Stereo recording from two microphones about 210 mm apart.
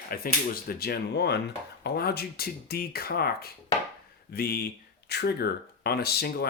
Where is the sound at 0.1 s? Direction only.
45° left (ahead or behind).